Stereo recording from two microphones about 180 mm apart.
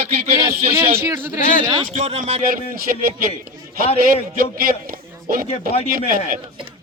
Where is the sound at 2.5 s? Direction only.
55° right (ahead or behind).